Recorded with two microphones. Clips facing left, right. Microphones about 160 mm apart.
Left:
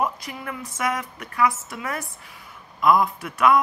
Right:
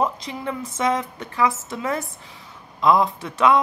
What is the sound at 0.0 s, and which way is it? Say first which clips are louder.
Speech: right 3 dB; 25° right (ahead or behind).